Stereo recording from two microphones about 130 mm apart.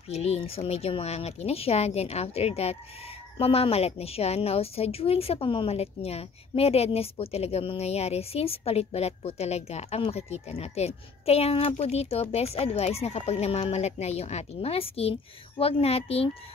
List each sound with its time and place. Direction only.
0.1 s a woman's voice: 55° left (ahead or behind)